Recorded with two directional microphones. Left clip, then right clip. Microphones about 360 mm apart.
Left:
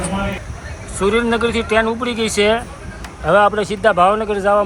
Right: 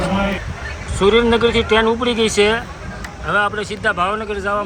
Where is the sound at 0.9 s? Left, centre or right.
Centre.